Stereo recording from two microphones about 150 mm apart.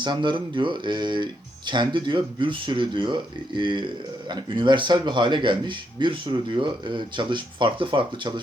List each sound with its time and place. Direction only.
0.0 s speech: 30° right (ahead or behind)